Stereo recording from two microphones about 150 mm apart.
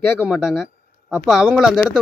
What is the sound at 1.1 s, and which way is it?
Speech, centre (ahead or behind).